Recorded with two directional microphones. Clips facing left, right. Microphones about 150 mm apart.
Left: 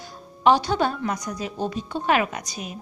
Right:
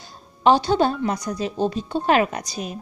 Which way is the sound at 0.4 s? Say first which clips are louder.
Right 2 dB; 30° right (ahead or behind).